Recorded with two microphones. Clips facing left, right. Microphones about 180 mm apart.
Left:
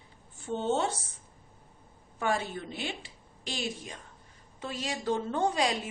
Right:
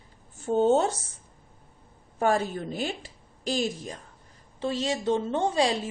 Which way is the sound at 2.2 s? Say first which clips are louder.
Right 6 dB; 40° right (ahead or behind).